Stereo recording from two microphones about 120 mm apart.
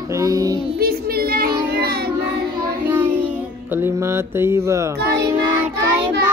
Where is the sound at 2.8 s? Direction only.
15° right (ahead or behind).